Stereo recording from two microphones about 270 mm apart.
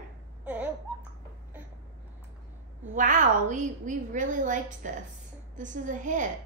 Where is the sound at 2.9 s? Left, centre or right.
Right.